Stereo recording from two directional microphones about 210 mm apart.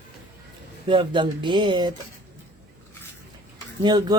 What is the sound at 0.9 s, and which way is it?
A man's voice, 20° right (ahead or behind).